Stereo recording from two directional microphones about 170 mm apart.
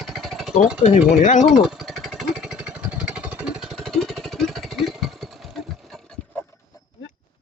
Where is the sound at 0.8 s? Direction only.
45° left (ahead or behind).